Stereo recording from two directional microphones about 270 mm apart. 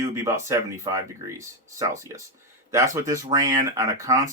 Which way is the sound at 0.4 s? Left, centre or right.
Centre.